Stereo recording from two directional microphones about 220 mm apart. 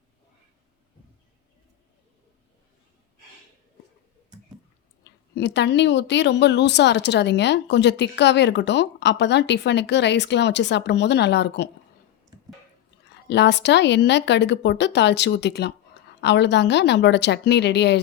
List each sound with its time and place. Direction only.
5.0 s speech: 50° left (ahead or behind)
13.2 s speech: 50° left (ahead or behind)